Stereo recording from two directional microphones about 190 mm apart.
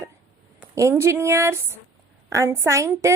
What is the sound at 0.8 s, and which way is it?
A woman's voice, 15° right (ahead or behind).